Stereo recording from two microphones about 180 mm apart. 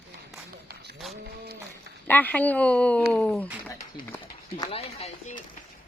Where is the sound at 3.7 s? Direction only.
10° left (ahead or behind).